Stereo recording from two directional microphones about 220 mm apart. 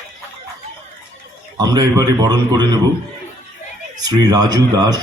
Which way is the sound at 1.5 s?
15° right (ahead or behind).